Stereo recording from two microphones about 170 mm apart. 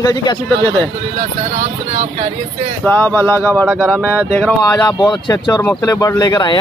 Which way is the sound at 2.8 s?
10° left (ahead or behind).